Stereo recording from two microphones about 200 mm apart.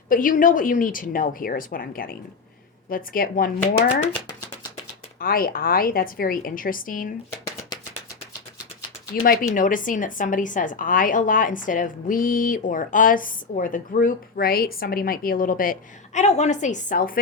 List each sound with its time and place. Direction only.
0.1 s a woman's voice: 40° left (ahead or behind)
5.2 s a woman's voice: 45° left (ahead or behind)
9.2 s a woman's voice: 45° left (ahead or behind)